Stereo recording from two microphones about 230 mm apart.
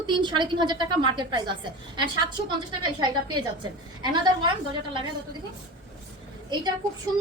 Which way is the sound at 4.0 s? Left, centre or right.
Centre.